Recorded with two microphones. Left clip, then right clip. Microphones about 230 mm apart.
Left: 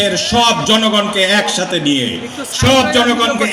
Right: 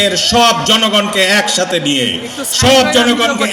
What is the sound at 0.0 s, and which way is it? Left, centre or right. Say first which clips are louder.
A man's voice: right 3 dB; right.